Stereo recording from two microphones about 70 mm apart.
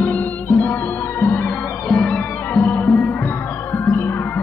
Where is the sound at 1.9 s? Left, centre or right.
Centre.